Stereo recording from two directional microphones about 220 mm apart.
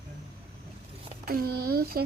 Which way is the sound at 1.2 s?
45° right (ahead or behind).